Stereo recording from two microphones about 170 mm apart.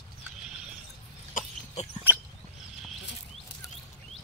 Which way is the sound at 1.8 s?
40° left (ahead or behind).